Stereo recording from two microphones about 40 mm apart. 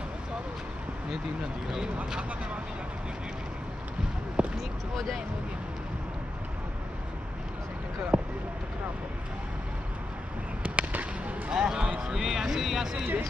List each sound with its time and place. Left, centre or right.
4.4 s a sound: right
8.1 s basketball bounce: right
10.6 s fireworks: right
11.5 s speech: centre